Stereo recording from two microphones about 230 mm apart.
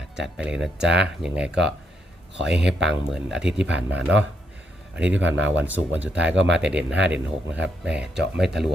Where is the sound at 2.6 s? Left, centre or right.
Right.